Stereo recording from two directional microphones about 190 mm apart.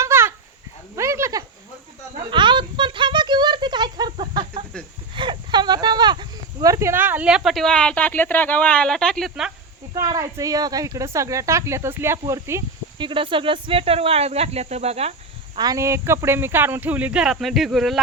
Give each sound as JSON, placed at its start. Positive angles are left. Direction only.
{"t": 0.0, "sound": "a sound", "side_deg": -15}
{"t": 0.9, "sound": "goat", "side_deg": -15}
{"t": 2.3, "sound": "a sound", "side_deg": -25}
{"t": 9.9, "sound": "speech", "side_deg": -20}
{"t": 13.1, "sound": "speech", "side_deg": -25}
{"t": 15.5, "sound": "speech", "side_deg": -20}